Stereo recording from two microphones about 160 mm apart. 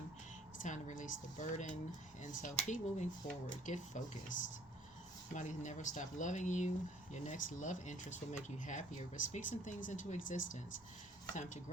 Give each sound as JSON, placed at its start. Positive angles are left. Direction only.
{"t": 0.6, "sound": "speech", "side_deg": 50}
{"t": 5.3, "sound": "speech", "side_deg": 50}